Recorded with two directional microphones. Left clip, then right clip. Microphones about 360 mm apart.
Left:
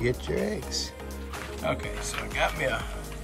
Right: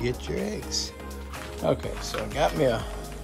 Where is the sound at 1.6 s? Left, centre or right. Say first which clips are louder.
Right 4 dB; centre.